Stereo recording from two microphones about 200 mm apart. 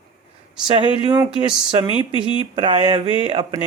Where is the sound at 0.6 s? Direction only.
25° right (ahead or behind).